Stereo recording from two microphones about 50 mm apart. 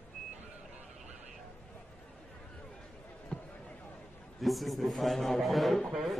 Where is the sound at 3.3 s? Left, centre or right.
Centre.